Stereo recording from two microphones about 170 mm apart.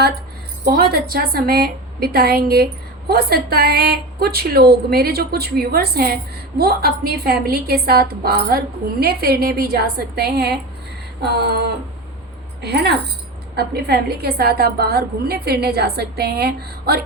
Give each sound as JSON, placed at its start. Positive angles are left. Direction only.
{"t": 0.6, "sound": "a woman's voice", "side_deg": -65}
{"t": 12.6, "sound": "a woman's voice", "side_deg": -75}